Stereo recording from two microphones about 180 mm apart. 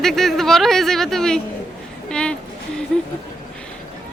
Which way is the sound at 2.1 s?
5° left (ahead or behind).